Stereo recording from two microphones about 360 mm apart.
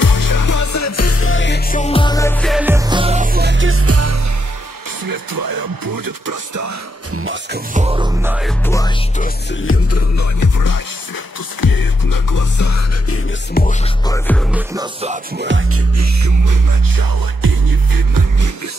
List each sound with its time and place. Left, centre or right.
0.0 s music: left; by 4.2 s right
5.0 s speech: right
7.2 s music: right
7.7 s music: centre
9.2 s music: left
11.6 s music: left
13.6 s music: left
14.0 s music: centre
14.8 s music: centre
15.3 s music: right
16.0 s music: right